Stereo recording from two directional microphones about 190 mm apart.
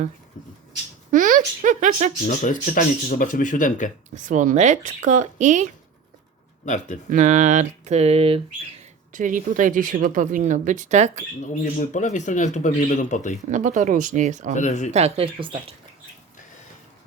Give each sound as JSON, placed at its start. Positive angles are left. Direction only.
{"t": 1.1, "sound": "speech", "side_deg": -45}
{"t": 2.2, "sound": "speech", "side_deg": 45}
{"t": 4.1, "sound": "speech", "side_deg": -40}
{"t": 6.7, "sound": "speech", "side_deg": 40}
{"t": 7.1, "sound": "speech", "side_deg": -40}
{"t": 9.1, "sound": "speech", "side_deg": -45}
{"t": 11.4, "sound": "speech", "side_deg": 40}
{"t": 13.5, "sound": "speech", "side_deg": -40}
{"t": 14.5, "sound": "speech", "side_deg": 40}
{"t": 14.9, "sound": "speech", "side_deg": -30}